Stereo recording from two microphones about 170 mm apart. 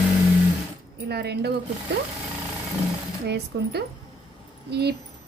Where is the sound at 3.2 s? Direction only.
75° right (ahead or behind).